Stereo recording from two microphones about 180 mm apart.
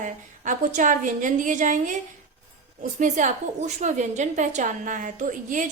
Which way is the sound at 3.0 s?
45° right (ahead or behind).